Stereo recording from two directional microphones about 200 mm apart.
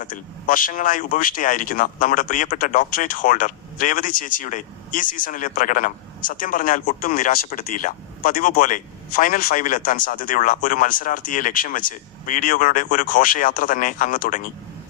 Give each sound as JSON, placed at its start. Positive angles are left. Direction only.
{"t": 0.0, "sound": "speech", "side_deg": 40}